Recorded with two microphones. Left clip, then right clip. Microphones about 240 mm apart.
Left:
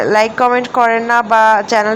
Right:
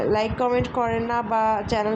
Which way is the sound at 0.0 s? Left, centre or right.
Centre.